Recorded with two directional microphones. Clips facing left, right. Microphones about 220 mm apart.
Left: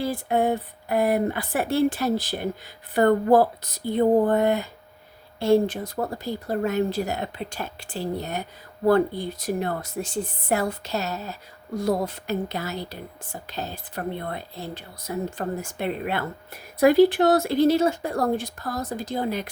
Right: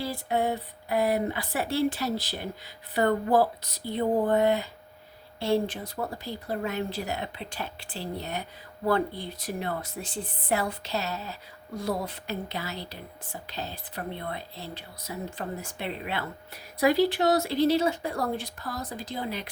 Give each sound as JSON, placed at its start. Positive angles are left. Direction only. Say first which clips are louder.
{"t": 0.0, "sound": "speech", "louder": "left 5 dB", "side_deg": 50}